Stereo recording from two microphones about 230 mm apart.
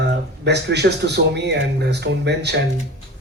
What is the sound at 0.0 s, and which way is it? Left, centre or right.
A man's voice, right.